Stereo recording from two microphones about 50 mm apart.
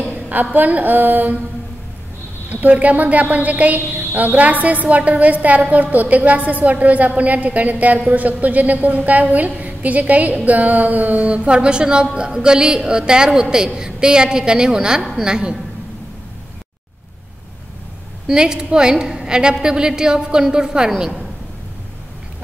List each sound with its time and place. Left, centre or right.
0.3 s a woman's voice: right
2.5 s a woman's voice: right; by 15.6 s centre
18.2 s a woman's voice: centre